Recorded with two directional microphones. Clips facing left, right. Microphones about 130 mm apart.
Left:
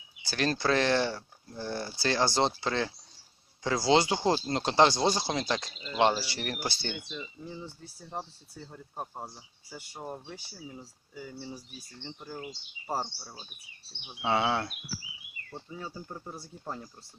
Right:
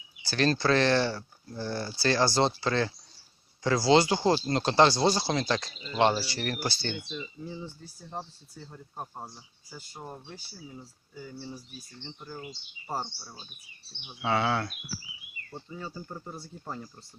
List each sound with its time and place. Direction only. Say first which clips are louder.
0.3 s speech: right 3 dB; 15° left (ahead or behind)
7.1 s speech: right 2 dB; 5° right (ahead or behind)
9.0 s speech: left 1 dB; 5° left (ahead or behind)
12.9 s speech: left 1 dB; 10° left (ahead or behind)
14.3 s speech: even; 20° left (ahead or behind)
15.7 s speech: right 1 dB; 5° left (ahead or behind)